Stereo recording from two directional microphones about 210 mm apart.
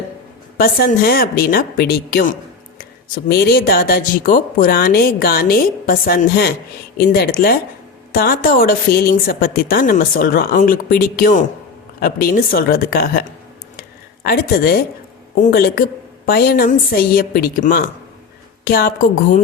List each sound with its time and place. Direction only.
0.5 s a woman's voice: 45° left (ahead or behind)